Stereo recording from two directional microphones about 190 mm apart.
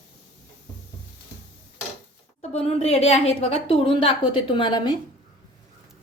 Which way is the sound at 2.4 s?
30° left (ahead or behind).